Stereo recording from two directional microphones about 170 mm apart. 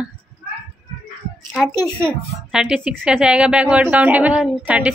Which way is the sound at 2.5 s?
5° right (ahead or behind).